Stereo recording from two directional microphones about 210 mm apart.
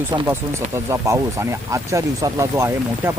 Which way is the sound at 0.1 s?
20° right (ahead or behind).